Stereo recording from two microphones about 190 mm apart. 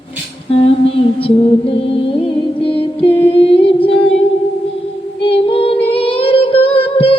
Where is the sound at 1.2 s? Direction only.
30° left (ahead or behind).